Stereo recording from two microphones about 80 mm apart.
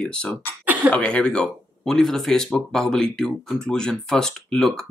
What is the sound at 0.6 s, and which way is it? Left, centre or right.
Throat clearing, centre.